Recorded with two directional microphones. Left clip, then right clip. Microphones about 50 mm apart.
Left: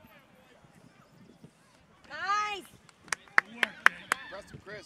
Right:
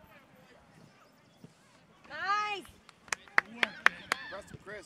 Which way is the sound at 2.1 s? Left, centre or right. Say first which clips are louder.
Left 1 dB; left.